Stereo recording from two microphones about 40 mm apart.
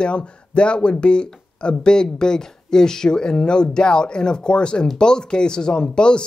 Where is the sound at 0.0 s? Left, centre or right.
Left.